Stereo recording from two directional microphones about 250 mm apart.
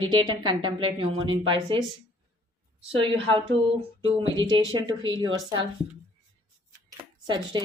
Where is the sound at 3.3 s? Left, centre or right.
Right.